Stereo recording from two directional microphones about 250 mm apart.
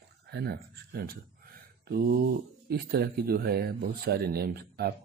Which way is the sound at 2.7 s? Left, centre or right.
Right.